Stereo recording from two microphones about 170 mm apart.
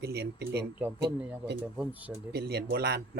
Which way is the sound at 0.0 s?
70° right (ahead or behind).